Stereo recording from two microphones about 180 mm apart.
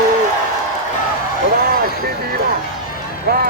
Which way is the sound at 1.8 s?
60° right (ahead or behind).